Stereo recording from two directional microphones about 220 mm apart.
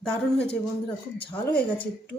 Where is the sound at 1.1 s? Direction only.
25° left (ahead or behind).